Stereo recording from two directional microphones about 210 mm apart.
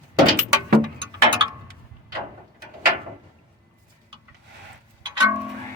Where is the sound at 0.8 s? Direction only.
20° right (ahead or behind).